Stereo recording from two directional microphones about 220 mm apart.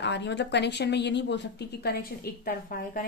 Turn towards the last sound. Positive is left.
turn(degrees=40)  # may be behind; listen again after turning